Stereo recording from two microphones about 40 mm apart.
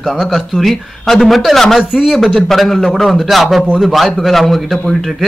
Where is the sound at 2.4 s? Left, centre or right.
Centre.